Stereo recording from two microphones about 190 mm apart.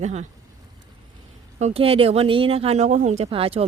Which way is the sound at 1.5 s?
35° right (ahead or behind).